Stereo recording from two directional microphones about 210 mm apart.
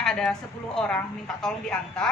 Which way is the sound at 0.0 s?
Centre (ahead or behind).